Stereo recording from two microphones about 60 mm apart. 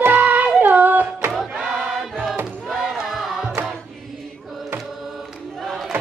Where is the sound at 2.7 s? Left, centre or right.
Centre.